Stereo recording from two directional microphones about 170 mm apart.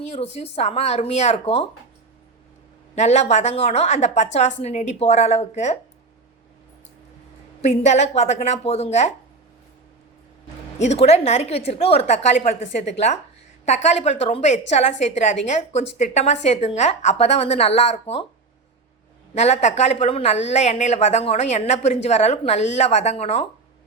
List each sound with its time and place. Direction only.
0.1 s a woman's voice: 35° left (ahead or behind)
2.9 s a woman's voice: 40° left (ahead or behind)
7.6 s a woman's voice: 40° left (ahead or behind)
10.8 s a woman's voice: 40° left (ahead or behind)
19.3 s a woman's voice: 40° left (ahead or behind)